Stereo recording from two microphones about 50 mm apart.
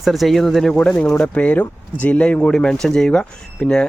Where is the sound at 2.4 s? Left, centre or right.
Centre.